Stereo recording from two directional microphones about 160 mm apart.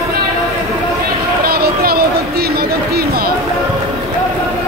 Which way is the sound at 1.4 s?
75° right (ahead or behind).